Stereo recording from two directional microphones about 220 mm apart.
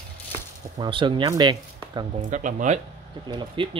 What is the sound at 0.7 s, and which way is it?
Speech, 20° right (ahead or behind).